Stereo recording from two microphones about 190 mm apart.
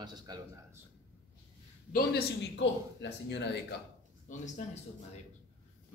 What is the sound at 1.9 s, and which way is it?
Speech, 55° left (ahead or behind).